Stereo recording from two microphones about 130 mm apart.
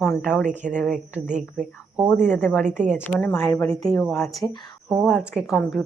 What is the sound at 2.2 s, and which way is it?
Speech, 15° left (ahead or behind).